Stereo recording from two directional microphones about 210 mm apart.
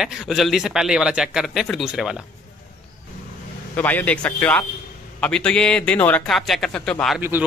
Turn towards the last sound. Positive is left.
turn(degrees=5)  # may be behind; listen again after turning